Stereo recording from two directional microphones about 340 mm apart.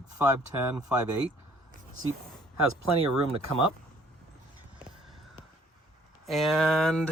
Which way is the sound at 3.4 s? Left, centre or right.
Right.